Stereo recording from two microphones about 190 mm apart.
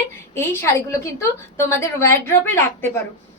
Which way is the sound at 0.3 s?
15° left (ahead or behind).